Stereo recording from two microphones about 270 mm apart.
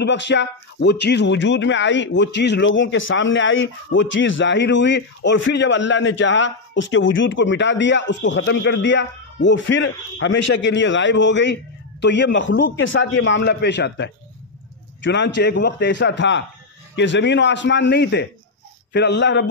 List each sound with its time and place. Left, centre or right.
0.0 s speech: left